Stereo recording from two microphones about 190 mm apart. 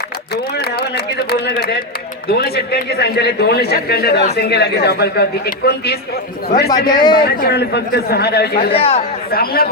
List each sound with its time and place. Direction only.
0.6 s a sound: 55° left (ahead or behind)
2.2 s a man's voice: 55° left (ahead or behind)
6.7 s a man's voice: 20° left (ahead or behind)
7.3 s a man's voice: 60° left (ahead or behind)
8.7 s speech: 30° left (ahead or behind)
9.3 s a man's voice: 50° left (ahead or behind)